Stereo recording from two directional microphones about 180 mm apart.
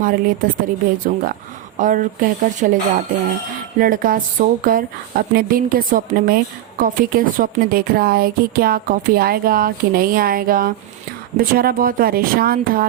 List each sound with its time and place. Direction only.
0.0 s speech: 50° right (ahead or behind)
3.8 s speech: 50° right (ahead or behind)